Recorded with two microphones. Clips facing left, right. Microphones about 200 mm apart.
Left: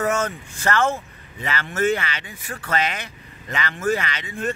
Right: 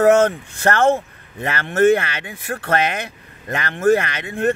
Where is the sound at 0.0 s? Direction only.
65° right (ahead or behind).